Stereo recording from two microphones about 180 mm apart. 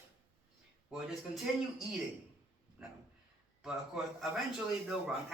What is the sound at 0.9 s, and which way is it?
A man's voice, centre (ahead or behind).